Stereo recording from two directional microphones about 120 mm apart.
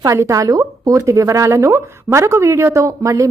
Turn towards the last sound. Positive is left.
turn(degrees=-25)  # may be behind; listen again after turning